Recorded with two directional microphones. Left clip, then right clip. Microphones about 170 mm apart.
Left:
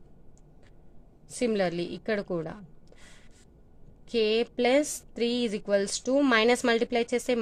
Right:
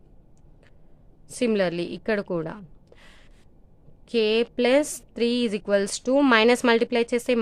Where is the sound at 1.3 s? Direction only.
25° right (ahead or behind).